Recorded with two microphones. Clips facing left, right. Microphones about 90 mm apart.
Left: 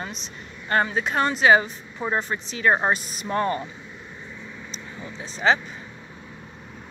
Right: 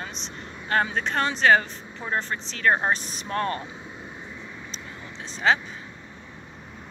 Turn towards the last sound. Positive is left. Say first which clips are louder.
# left 1 dB
turn(degrees=5)  # may be behind; listen again after turning